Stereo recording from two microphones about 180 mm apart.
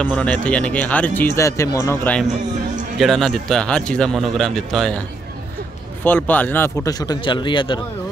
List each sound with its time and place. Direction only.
0.0 s speech: 5° left (ahead or behind)
3.0 s speech: centre (ahead or behind)
6.0 s a man's voice: 10° left (ahead or behind); by 7.8 s 25° left (ahead or behind)